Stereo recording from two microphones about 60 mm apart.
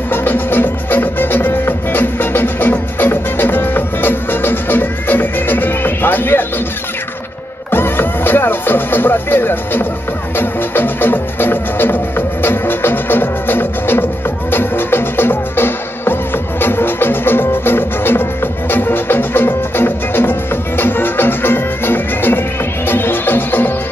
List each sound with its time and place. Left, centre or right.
0.1 s music: left
7.7 s music: left